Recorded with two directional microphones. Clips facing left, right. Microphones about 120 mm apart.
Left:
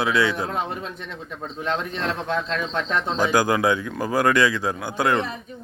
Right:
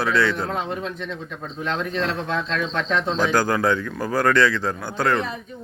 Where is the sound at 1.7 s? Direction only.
35° left (ahead or behind).